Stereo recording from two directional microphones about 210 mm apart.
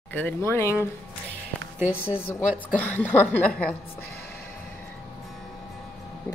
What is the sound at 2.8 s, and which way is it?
Speech, 10° left (ahead or behind).